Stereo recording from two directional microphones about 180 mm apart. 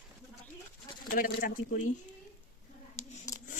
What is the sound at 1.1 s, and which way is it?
Speech, 50° left (ahead or behind).